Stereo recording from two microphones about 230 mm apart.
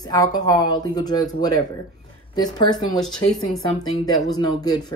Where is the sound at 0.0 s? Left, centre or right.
Centre.